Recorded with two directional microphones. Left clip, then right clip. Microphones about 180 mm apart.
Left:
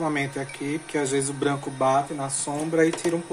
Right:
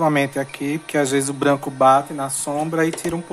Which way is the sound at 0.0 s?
40° right (ahead or behind).